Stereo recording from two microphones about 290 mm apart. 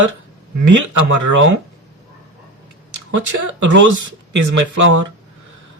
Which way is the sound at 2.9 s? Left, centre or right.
Right.